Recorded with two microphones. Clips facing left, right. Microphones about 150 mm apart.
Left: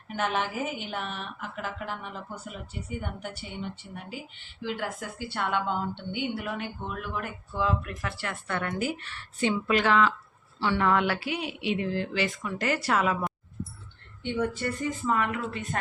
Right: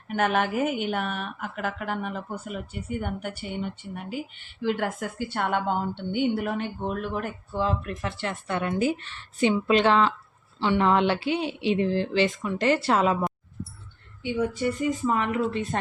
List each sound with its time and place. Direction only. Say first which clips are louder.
0.1 s a woman's voice: right 5 dB; 55° right (ahead or behind); by 13.1 s 30° right (ahead or behind)
14.2 s speech: right 3 dB; 10° right (ahead or behind); by 15.8 s 25° right (ahead or behind)